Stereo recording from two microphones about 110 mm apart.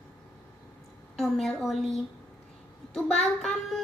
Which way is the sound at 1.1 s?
Centre (ahead or behind).